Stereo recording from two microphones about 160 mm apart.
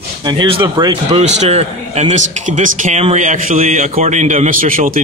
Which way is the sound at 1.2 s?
40° right (ahead or behind).